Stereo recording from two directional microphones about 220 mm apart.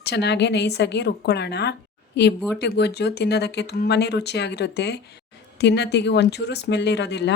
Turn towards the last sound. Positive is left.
turn(degrees=50)  # may be behind; listen again after turning